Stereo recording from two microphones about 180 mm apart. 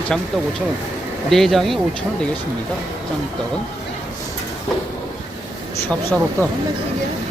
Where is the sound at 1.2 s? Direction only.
Centre (ahead or behind).